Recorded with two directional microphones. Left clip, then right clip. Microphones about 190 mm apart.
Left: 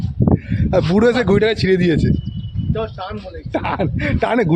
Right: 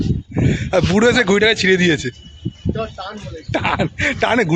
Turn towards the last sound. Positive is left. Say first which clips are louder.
# right 2 dB
turn(degrees=5)  # may be behind; listen again after turning